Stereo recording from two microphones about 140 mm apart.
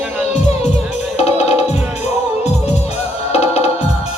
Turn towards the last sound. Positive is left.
turn(degrees=50)  # may be behind; listen again after turning